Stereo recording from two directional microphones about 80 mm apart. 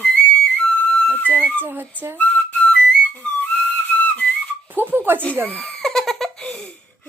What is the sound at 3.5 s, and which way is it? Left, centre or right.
Flute, left.